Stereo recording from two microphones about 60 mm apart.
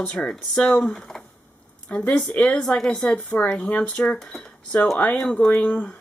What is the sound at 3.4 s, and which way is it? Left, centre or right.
Speech, left.